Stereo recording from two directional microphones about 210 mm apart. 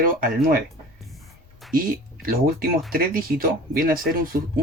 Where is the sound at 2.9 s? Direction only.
45° right (ahead or behind).